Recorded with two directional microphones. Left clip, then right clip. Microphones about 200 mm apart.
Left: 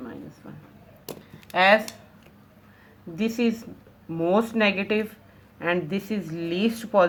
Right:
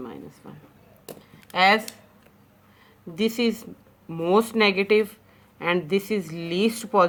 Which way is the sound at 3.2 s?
45° right (ahead or behind).